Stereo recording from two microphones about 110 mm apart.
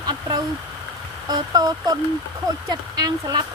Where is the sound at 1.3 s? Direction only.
35° right (ahead or behind).